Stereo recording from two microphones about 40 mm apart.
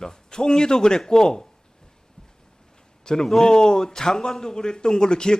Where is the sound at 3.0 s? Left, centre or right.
Centre.